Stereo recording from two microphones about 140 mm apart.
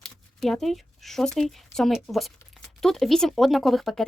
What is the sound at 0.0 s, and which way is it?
Speech, centre (ahead or behind).